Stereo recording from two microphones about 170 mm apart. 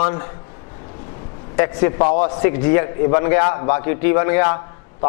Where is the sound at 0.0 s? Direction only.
20° left (ahead or behind).